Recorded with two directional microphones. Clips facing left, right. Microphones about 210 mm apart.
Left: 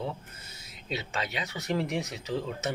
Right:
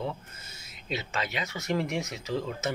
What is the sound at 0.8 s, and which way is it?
Speech, 35° left (ahead or behind).